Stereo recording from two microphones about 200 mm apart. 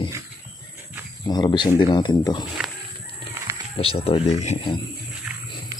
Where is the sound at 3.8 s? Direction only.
30° left (ahead or behind).